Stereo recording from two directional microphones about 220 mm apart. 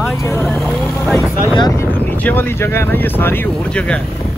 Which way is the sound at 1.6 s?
20° left (ahead or behind).